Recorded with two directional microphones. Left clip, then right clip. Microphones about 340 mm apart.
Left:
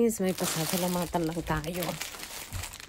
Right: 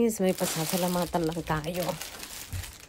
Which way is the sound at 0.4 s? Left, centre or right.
Left.